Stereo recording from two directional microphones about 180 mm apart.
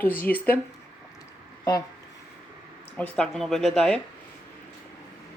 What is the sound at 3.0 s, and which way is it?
Speech, 5° left (ahead or behind).